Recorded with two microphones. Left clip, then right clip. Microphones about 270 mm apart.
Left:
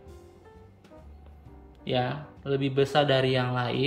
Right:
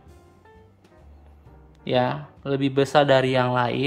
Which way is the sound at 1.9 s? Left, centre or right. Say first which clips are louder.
Right 6 dB; centre.